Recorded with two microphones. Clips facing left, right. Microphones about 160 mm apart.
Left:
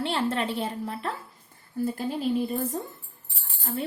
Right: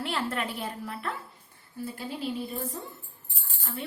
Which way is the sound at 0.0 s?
30° left (ahead or behind).